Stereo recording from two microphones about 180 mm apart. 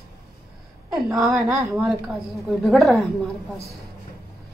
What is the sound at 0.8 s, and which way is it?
A woman's voice, 5° right (ahead or behind).